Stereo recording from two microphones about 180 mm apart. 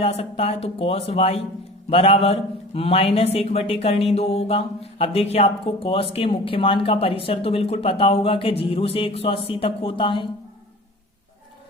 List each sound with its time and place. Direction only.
0.0 s a man's voice: 35° left (ahead or behind)